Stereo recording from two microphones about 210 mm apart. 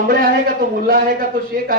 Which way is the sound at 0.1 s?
45° right (ahead or behind).